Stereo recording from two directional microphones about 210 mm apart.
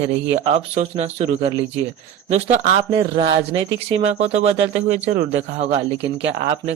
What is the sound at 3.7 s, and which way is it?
Speech, 60° right (ahead or behind).